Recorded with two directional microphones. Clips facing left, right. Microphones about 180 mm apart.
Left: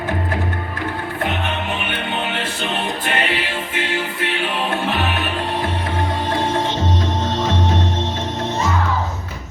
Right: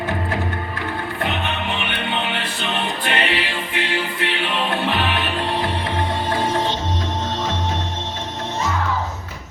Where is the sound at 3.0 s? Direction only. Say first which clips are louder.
Right 1 dB; 45° left (ahead or behind).